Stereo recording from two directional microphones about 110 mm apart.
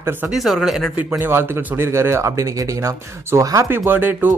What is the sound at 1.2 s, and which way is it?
A man's voice, 20° right (ahead or behind).